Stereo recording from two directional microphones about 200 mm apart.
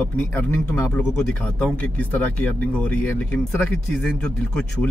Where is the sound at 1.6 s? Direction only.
5° left (ahead or behind).